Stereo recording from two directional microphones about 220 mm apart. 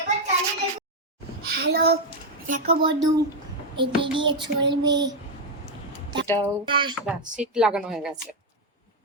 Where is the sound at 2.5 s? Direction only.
25° right (ahead or behind).